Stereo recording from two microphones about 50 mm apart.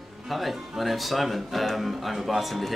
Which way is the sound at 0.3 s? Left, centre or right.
Centre.